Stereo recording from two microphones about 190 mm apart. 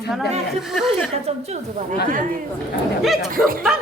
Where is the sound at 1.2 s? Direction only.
35° right (ahead or behind).